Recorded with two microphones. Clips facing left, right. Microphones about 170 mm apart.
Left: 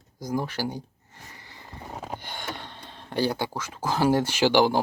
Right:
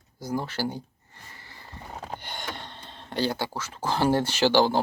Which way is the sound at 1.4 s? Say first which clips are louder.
Left 1 dB; 15° left (ahead or behind).